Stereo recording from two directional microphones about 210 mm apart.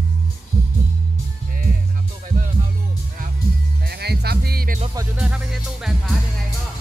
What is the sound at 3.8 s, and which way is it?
Music, 50° right (ahead or behind).